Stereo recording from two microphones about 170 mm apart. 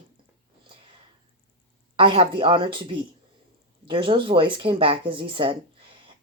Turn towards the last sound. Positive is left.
turn(degrees=-30)  # may be behind; listen again after turning